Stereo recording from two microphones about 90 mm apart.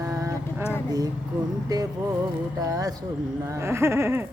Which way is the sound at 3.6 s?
30° right (ahead or behind).